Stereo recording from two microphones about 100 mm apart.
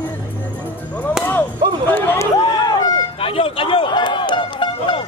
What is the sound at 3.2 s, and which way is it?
Music, 65° left (ahead or behind).